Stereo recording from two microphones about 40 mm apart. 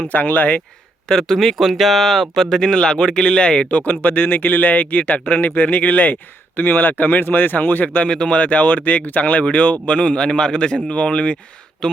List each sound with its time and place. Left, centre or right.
0.1 s speech: left
1.0 s speech: centre
1.4 s speech: centre
2.6 s a man's voice: centre
3.7 s speech: left
8.0 s a man's voice: left
8.4 s a man's voice: left; by 12.0 s centre